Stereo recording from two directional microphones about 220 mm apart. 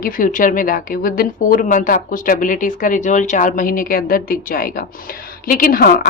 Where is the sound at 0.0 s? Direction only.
35° left (ahead or behind).